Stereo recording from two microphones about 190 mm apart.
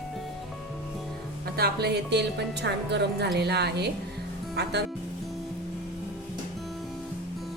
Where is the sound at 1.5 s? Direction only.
55° right (ahead or behind).